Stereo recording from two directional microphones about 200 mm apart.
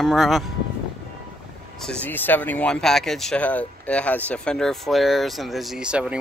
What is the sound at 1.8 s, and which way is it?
Speech, 5° left (ahead or behind).